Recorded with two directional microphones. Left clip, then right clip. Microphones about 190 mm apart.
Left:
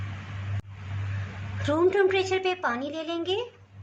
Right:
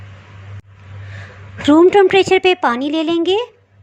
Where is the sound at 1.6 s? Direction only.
40° right (ahead or behind).